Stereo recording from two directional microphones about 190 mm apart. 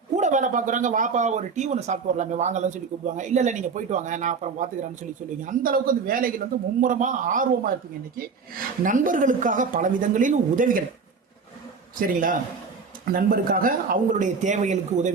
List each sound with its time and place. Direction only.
0.2 s speech: 40° right (ahead or behind)
11.9 s speech: 45° right (ahead or behind)